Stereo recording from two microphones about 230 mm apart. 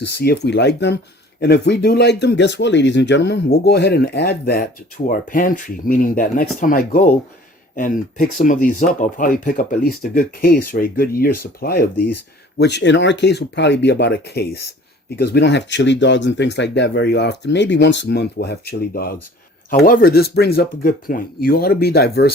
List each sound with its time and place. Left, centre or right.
0.2 s speech: left